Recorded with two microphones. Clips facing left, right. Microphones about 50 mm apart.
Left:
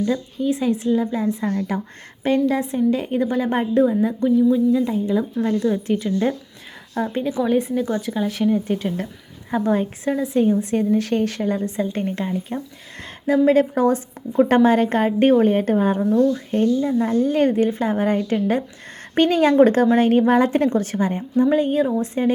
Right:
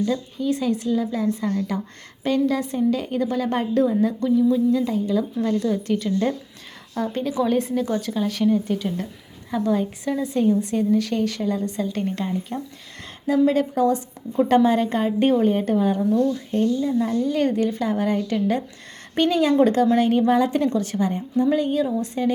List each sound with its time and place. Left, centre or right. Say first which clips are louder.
0.1 s a woman's voice: left 2 dB; left
7.3 s a woman's voice: left 1 dB; centre; by 12.0 s left
12.1 s a woman's voice: left 1 dB; centre
13.2 s a woman's voice: left 3 dB; left
19.1 s a woman's voice: left 3 dB; left